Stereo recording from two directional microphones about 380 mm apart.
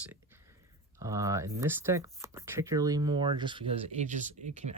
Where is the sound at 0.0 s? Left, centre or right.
Centre.